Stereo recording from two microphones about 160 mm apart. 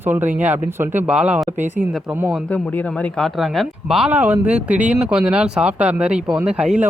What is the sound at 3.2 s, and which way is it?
Speech, centre (ahead or behind).